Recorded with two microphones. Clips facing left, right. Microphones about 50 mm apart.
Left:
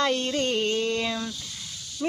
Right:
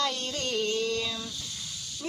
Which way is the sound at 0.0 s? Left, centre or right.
Left.